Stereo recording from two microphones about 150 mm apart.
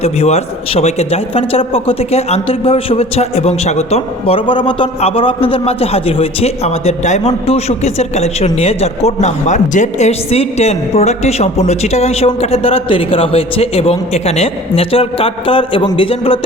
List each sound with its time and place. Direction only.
0.0 s a man's voice: 45° left (ahead or behind)